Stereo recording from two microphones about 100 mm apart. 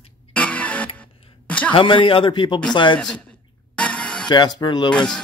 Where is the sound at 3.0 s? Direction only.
5° left (ahead or behind).